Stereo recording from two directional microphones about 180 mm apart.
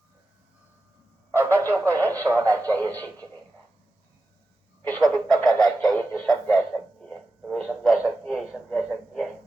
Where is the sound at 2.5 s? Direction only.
10° left (ahead or behind).